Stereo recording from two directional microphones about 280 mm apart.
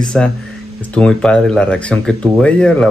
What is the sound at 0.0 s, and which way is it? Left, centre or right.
Speech, centre.